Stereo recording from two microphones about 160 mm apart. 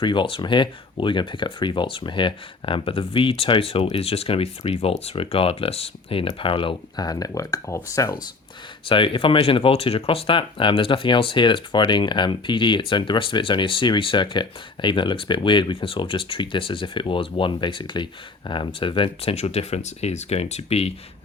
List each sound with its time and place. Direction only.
0.0 s speech: 30° left (ahead or behind)
8.9 s speech: 30° left (ahead or behind)